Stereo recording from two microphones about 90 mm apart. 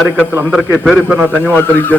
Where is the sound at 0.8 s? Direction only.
10° right (ahead or behind).